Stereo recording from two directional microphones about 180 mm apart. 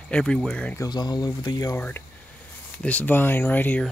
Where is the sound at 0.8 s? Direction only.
25° left (ahead or behind).